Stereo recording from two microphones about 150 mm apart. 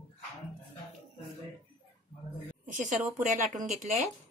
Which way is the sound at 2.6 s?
60° right (ahead or behind).